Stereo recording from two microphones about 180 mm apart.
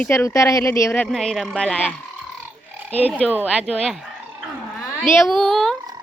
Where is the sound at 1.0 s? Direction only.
5° left (ahead or behind).